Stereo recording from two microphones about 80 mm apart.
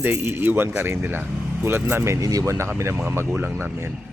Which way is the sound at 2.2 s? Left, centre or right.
Right.